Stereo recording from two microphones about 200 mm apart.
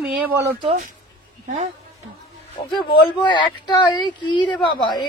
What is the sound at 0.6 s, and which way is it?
Speech, 40° right (ahead or behind).